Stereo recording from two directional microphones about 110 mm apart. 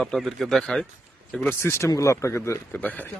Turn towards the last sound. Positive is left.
turn(degrees=15)  # may be behind; listen again after turning